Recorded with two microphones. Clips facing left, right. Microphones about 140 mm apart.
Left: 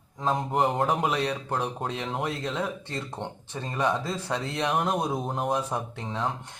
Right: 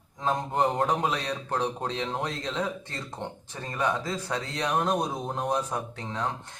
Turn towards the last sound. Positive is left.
turn(degrees=10)  # may be behind; listen again after turning